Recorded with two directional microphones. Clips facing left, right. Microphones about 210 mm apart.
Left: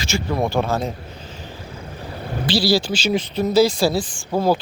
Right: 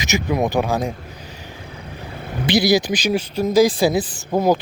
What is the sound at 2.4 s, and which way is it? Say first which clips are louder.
Speech: right 3 dB; 20° right (ahead or behind).